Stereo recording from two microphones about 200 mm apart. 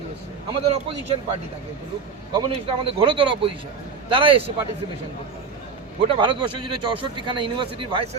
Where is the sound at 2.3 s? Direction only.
25° right (ahead or behind).